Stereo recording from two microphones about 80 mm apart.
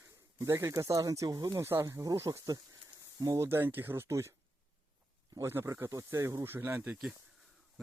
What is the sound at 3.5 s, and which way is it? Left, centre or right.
Speech, right.